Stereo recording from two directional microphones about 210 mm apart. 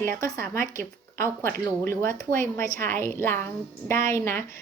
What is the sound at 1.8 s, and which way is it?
Speech, 10° left (ahead or behind).